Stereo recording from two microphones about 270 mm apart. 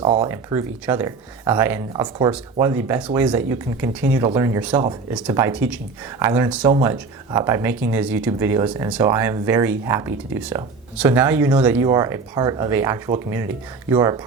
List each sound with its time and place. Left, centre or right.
0.0 s speech: centre
0.3 s speech: centre